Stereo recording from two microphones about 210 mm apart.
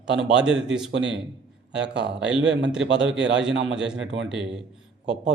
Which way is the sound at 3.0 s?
5° right (ahead or behind).